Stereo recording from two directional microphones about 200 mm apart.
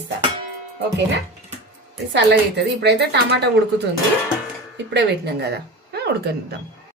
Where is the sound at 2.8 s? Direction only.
55° right (ahead or behind).